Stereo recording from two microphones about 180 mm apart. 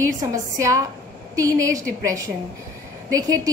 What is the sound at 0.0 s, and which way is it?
A woman's voice, 15° right (ahead or behind).